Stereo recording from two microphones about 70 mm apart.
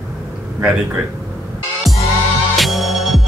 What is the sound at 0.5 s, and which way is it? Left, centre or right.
Speech, centre.